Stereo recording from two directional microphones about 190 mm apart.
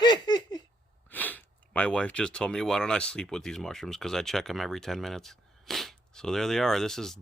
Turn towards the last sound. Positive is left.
turn(degrees=0)  # may be behind; listen again after turning